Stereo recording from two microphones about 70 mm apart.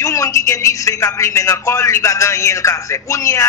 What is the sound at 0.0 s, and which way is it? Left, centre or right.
Speech, left.